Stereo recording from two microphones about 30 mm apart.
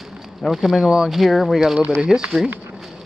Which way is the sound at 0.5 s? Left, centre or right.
Centre.